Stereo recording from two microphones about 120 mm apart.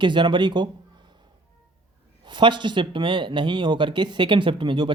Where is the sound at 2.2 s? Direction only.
40° right (ahead or behind).